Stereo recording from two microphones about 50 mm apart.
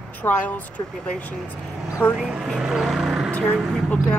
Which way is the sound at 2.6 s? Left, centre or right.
Centre.